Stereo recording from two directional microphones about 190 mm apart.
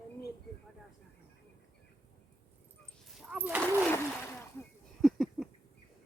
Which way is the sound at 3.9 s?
10° left (ahead or behind).